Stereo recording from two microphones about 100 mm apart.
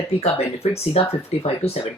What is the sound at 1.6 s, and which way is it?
Speech, 15° left (ahead or behind).